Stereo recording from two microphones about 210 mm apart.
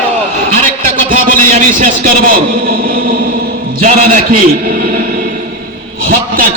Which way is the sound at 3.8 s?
35° right (ahead or behind).